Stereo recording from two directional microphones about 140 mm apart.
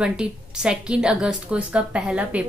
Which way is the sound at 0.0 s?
5° right (ahead or behind).